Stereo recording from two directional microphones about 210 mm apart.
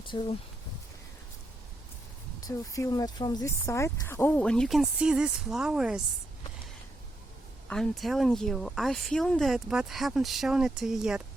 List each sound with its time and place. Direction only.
0.1 s speech: 25° left (ahead or behind)
2.4 s speech: 15° left (ahead or behind); by 6.0 s 5° right (ahead or behind)
7.7 s speech: centre (ahead or behind)